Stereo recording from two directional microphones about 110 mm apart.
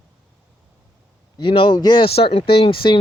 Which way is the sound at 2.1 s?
60° left (ahead or behind).